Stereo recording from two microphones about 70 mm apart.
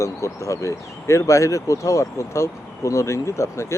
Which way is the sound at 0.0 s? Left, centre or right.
Left.